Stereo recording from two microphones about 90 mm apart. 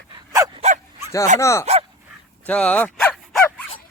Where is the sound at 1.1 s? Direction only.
35° left (ahead or behind).